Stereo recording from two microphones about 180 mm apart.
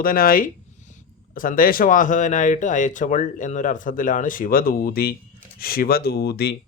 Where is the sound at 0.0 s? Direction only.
55° left (ahead or behind).